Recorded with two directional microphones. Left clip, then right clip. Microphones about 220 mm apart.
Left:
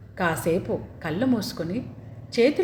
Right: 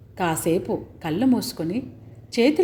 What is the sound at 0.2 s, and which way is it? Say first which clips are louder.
Speech: right 1 dB; 35° right (ahead or behind).